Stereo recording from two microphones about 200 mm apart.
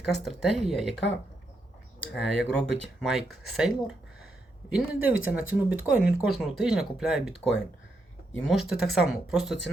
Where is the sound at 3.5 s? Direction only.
5° right (ahead or behind).